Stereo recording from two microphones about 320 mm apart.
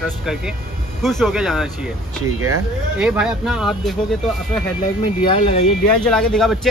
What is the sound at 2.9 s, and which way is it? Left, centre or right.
Speech, centre.